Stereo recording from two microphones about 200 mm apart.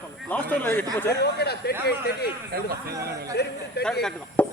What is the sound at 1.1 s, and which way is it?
Speech, 55° left (ahead or behind).